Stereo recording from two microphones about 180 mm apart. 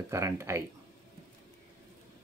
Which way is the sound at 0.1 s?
15° right (ahead or behind).